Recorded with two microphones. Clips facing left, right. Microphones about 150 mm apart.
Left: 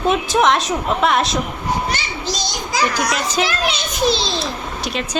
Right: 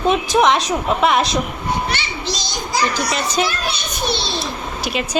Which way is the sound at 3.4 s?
90° left.